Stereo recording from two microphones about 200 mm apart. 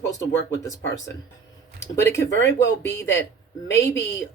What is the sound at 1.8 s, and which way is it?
Speech, 15° left (ahead or behind).